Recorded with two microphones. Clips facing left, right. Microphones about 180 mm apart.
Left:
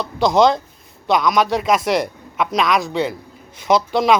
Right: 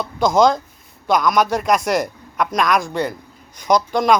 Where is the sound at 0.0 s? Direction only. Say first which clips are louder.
Even; centre (ahead or behind).